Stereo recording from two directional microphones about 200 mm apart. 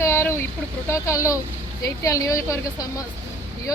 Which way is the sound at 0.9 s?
15° left (ahead or behind).